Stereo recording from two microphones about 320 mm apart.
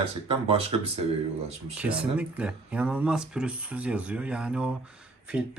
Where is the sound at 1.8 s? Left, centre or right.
Centre.